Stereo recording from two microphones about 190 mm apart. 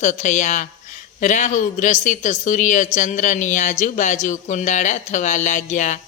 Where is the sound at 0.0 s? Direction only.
40° left (ahead or behind).